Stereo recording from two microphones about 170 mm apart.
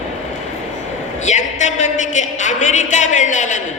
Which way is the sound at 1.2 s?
45° left (ahead or behind).